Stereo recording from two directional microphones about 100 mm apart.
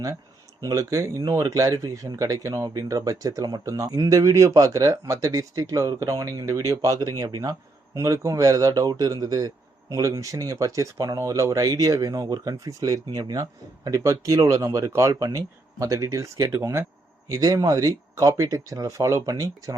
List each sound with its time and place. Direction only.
0.6 s speech: 35° right (ahead or behind)
7.9 s speech: 30° right (ahead or behind)